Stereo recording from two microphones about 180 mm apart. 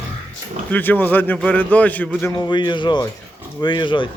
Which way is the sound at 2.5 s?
25° left (ahead or behind).